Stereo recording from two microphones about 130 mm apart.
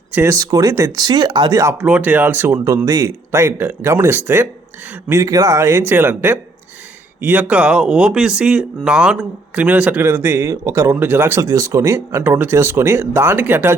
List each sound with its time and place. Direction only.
0.1 s speech: 20° right (ahead or behind)
1.8 s speech: 10° right (ahead or behind)